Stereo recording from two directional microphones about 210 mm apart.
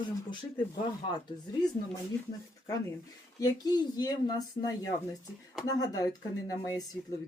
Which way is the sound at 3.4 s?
20° left (ahead or behind).